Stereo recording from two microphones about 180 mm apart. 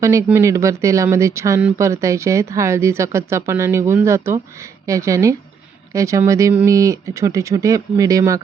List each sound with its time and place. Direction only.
0.0 s speech: 15° right (ahead or behind)